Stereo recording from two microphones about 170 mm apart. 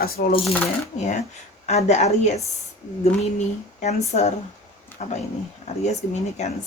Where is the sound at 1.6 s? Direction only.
40° left (ahead or behind).